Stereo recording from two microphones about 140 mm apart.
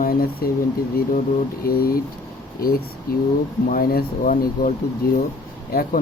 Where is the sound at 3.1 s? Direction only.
90° left.